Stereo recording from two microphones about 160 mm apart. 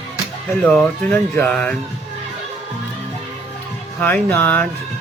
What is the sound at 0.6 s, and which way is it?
Speech, 10° left (ahead or behind).